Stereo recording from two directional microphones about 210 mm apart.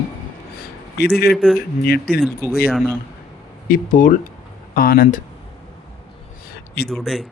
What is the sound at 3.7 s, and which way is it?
A man's voice, 40° left (ahead or behind).